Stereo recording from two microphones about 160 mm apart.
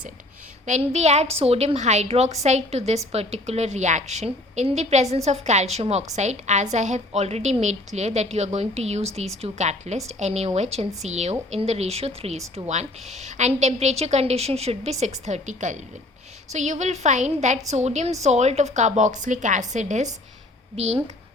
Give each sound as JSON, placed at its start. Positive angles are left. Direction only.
{"t": 0.6, "sound": "a woman's voice", "side_deg": -45}